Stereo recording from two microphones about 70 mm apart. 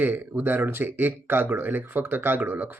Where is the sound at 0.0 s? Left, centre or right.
Right.